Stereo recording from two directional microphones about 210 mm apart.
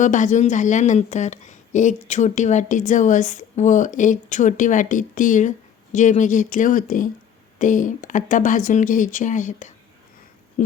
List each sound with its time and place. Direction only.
0.0 s a woman's voice: 35° left (ahead or behind)